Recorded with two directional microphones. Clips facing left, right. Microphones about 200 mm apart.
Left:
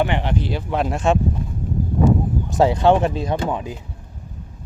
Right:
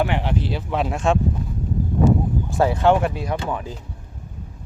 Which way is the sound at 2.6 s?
15° left (ahead or behind).